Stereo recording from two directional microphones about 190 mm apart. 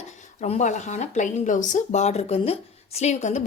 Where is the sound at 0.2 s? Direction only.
35° left (ahead or behind).